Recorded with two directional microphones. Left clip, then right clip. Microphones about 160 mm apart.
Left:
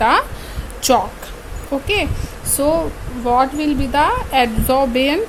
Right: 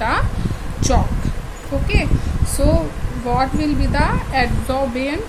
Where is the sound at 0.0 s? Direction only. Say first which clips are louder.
Left 6 dB; 45° left (ahead or behind).